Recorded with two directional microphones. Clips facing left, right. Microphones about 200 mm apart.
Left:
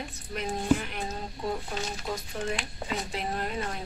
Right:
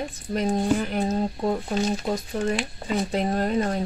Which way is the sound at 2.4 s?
50° right (ahead or behind).